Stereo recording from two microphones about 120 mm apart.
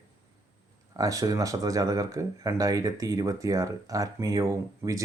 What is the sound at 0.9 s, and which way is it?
Speech, 30° right (ahead or behind).